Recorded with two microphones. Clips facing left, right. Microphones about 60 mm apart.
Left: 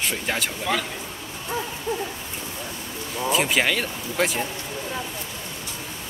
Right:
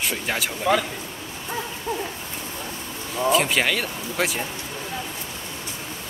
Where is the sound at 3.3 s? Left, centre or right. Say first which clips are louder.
Left 1 dB; centre.